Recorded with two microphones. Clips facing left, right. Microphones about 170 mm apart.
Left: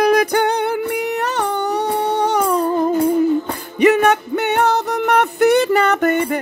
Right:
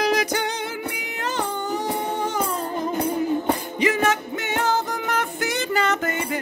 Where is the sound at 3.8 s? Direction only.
65° left (ahead or behind).